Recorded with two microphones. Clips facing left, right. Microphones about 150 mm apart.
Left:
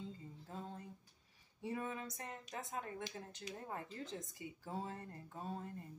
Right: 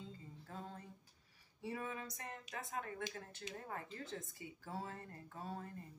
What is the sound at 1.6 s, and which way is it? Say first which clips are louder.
Speech: left 2 dB; 25° left (ahead or behind).